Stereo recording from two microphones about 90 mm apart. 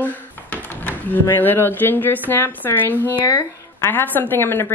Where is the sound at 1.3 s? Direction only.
25° left (ahead or behind).